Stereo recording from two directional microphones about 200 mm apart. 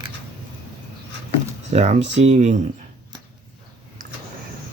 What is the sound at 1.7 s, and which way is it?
Speech, 35° right (ahead or behind).